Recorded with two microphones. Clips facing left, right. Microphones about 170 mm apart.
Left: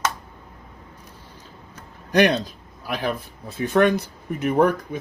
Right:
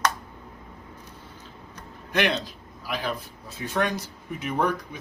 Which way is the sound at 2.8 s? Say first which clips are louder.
Left 4 dB; 55° left (ahead or behind).